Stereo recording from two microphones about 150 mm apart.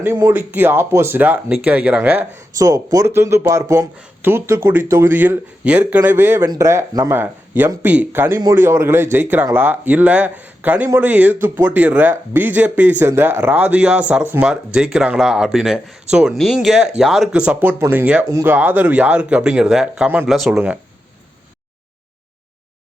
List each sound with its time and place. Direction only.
0.0 s speech: 15° right (ahead or behind)
2.6 s speech: 25° right (ahead or behind); by 20.7 s 5° right (ahead or behind)